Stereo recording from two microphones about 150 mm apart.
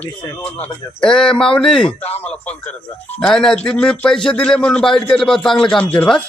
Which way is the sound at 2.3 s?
5° left (ahead or behind).